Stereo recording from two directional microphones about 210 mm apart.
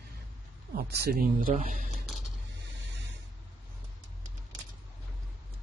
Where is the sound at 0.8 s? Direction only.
45° right (ahead or behind).